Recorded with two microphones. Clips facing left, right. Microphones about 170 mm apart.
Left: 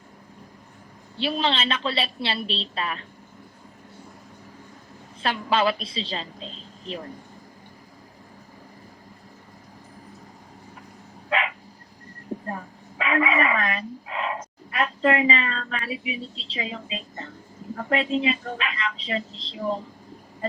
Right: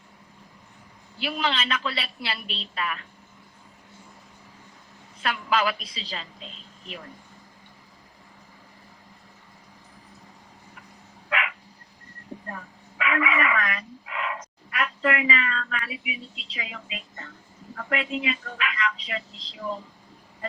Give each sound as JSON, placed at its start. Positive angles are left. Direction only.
{"t": 1.2, "sound": "speech", "side_deg": 30}
{"t": 5.2, "sound": "speech", "side_deg": 30}
{"t": 11.3, "sound": "dog", "side_deg": 30}
{"t": 17.7, "sound": "speech", "side_deg": 30}